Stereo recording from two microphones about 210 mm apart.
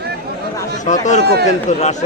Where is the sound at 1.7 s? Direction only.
35° left (ahead or behind).